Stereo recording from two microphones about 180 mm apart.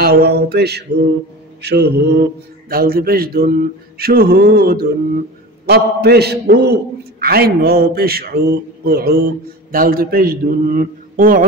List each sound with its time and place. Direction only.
0.0 s a man's voice: 60° right (ahead or behind)